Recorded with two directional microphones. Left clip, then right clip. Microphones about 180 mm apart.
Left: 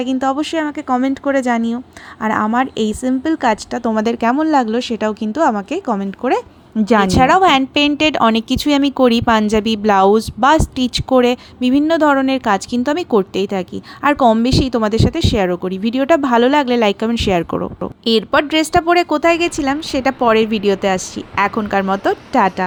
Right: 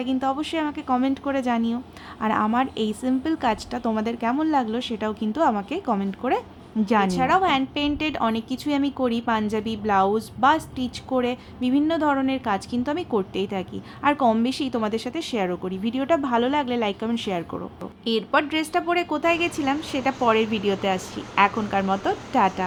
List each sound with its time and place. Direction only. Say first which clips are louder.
0.0 s speech: left 7 dB; 35° left (ahead or behind)
7.1 s a woman's voice: left 9 dB; 50° left (ahead or behind)